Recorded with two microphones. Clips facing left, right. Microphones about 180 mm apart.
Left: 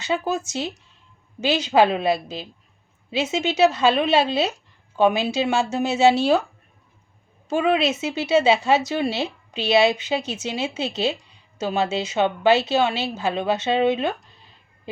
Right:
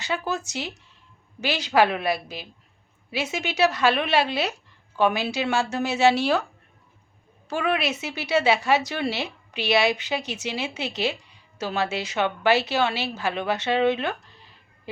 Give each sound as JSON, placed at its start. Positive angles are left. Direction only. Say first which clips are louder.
{"t": 0.0, "sound": "speech", "louder": "left 4 dB", "side_deg": 20}
{"t": 7.4, "sound": "speech", "louder": "left 5 dB", "side_deg": 20}